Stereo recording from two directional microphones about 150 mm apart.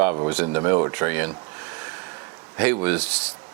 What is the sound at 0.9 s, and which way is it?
Speech, 15° right (ahead or behind).